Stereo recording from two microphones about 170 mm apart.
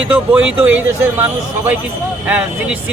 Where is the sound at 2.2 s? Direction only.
10° right (ahead or behind).